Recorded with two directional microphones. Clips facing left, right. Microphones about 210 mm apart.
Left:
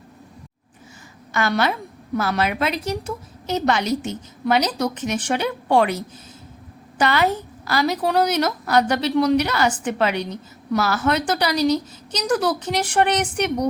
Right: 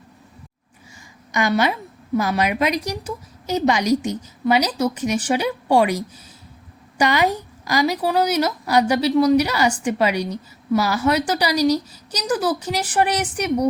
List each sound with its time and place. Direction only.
1.3 s a woman's voice: 15° right (ahead or behind)
7.0 s a woman's voice: 15° right (ahead or behind)